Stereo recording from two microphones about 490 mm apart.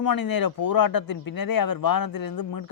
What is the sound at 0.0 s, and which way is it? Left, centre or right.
A man's voice, left.